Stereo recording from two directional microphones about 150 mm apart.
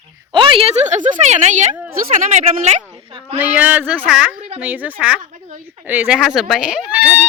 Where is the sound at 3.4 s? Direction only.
10° right (ahead or behind).